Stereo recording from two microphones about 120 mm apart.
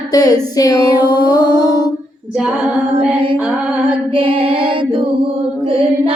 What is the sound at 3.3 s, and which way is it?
Music, 10° right (ahead or behind).